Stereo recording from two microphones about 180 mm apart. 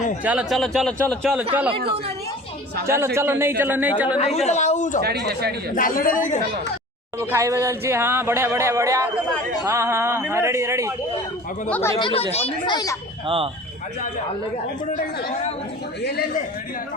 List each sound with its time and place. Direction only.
0.3 s a man's voice: 5° right (ahead or behind)
2.8 s speech: 15° right (ahead or behind)
4.2 s speech: 35° left (ahead or behind)
5.0 s speech: 65° right (ahead or behind)
5.7 s a man's voice: 50° left (ahead or behind)
7.2 s speech: 15° right (ahead or behind)
11.7 s speech: 15° left (ahead or behind)
11.9 s speech: 30° left (ahead or behind)
13.2 s speech: 30° right (ahead or behind)
14.9 s a man's voice: 50° left (ahead or behind)
16.0 s a man's voice: 70° left (ahead or behind)